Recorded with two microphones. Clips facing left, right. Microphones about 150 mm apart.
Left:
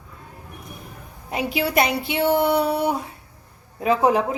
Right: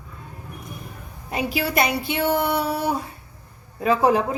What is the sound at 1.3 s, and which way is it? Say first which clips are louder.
A woman's voice: left 1 dB; 20° left (ahead or behind).